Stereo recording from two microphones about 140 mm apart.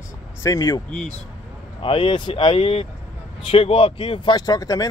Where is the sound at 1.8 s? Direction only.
40° left (ahead or behind).